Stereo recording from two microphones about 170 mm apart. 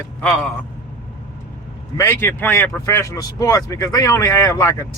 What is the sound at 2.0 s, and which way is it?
Speech, 15° left (ahead or behind).